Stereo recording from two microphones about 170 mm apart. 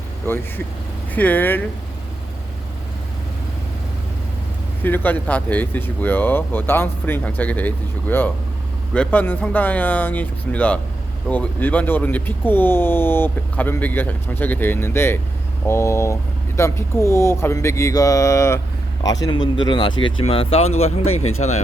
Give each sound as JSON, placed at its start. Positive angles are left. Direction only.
{"t": 0.2, "sound": "speech", "side_deg": 15}
{"t": 4.8, "sound": "speech", "side_deg": 10}